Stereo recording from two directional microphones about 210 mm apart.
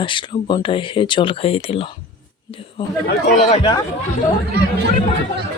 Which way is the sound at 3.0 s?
40° left (ahead or behind).